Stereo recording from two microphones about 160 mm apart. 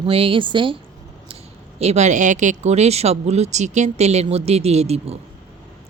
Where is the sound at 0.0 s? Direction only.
35° right (ahead or behind).